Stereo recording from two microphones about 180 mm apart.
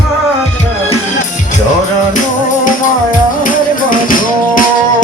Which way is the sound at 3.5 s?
50° left (ahead or behind).